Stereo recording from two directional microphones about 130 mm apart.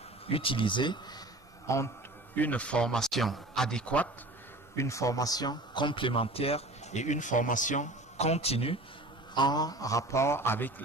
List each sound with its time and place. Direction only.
0.3 s speech: 45° left (ahead or behind)
1.7 s a man's voice: 25° left (ahead or behind)
2.3 s speech: 10° left (ahead or behind)
4.7 s speech: 25° left (ahead or behind); by 8.7 s 50° left (ahead or behind)
9.3 s a man's voice: 35° left (ahead or behind); by 10.7 s 15° left (ahead or behind)